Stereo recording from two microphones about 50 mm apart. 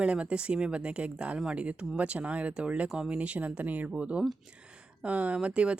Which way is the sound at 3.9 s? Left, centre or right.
Right.